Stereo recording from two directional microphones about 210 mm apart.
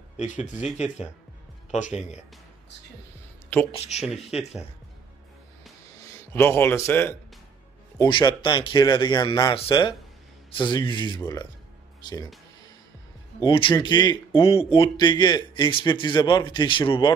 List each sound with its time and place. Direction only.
0.2 s speech: 35° left (ahead or behind)
1.7 s speech: 35° left (ahead or behind)
3.7 s speech: 30° left (ahead or behind)
6.0 s speech: 10° left (ahead or behind)
13.4 s speech: 25° left (ahead or behind)